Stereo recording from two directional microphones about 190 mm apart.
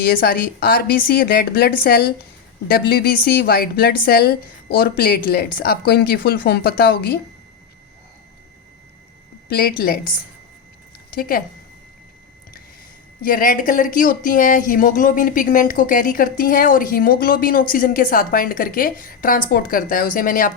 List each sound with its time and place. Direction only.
0.0 s speech: 50° left (ahead or behind)
9.5 s speech: 50° left (ahead or behind)
11.1 s speech: 50° left (ahead or behind)
13.2 s speech: 50° left (ahead or behind)